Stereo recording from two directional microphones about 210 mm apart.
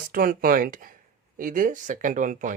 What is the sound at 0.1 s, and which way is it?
Speech, 45° right (ahead or behind).